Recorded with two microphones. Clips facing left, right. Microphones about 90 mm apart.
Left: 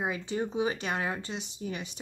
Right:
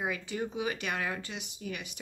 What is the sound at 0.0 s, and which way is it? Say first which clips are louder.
Speech: left 3 dB; 25° left (ahead or behind).